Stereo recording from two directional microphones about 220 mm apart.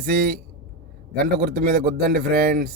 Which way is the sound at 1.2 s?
45° right (ahead or behind).